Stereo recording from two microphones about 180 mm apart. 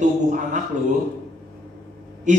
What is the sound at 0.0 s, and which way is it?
Speech, 45° right (ahead or behind).